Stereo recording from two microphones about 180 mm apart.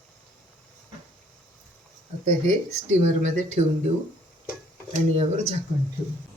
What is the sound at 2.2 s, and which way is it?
Speech, 40° right (ahead or behind).